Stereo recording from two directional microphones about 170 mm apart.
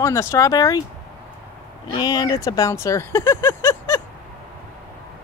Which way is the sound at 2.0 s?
25° left (ahead or behind).